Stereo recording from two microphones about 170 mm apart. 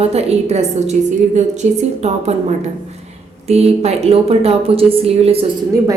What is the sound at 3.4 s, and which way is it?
A woman's voice, 40° right (ahead or behind).